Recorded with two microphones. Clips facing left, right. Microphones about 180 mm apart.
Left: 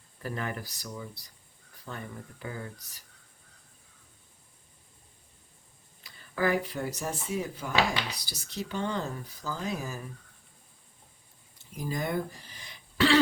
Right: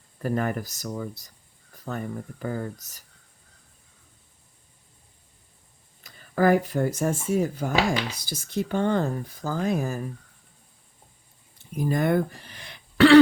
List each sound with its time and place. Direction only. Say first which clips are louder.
0.2 s speech: right 9 dB; 50° right (ahead or behind)
6.0 s speech: right 7 dB; 45° right (ahead or behind)
11.7 s speech: right 9 dB; 60° right (ahead or behind)